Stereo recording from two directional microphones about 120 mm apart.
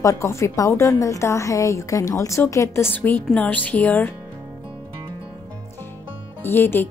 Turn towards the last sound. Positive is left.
turn(degrees=15)  # may be behind; listen again after turning